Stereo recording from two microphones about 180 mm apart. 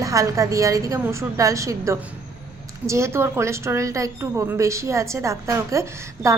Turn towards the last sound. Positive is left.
turn(degrees=-15)  # may be behind; listen again after turning